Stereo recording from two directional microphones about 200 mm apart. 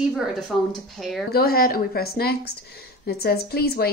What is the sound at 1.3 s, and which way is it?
A woman's voice, 50° left (ahead or behind).